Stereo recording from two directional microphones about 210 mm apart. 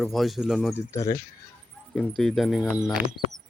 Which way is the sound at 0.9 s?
15° left (ahead or behind).